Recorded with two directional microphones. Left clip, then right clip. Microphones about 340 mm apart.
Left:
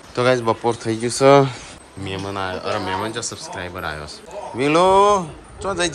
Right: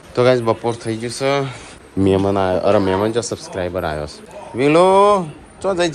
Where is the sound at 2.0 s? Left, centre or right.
Centre.